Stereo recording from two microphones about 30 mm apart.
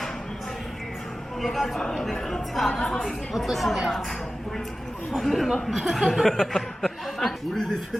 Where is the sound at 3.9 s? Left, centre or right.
Centre.